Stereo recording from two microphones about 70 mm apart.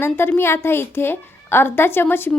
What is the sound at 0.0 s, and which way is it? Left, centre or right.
A woman's voice, left.